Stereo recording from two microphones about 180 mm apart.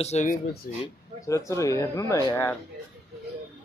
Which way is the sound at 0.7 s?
50° left (ahead or behind).